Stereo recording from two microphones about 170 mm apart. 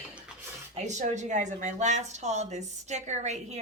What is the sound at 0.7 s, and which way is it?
A woman's voice, 45° right (ahead or behind).